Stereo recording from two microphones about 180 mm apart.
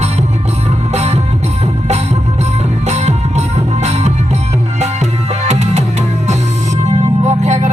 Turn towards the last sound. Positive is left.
turn(degrees=-35)  # may be behind; listen again after turning